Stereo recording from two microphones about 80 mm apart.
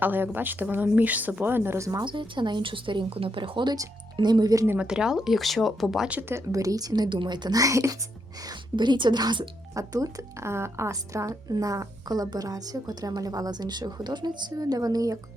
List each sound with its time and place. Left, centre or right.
0.0 s a woman's voice: right
2.0 s speech: right
4.2 s speech: right
4.8 s speech: centre
6.1 s a woman's voice: right
6.3 s speech: right
7.6 s a woman's voice: right
8.7 s a woman's voice: right
9.7 s a woman's voice: right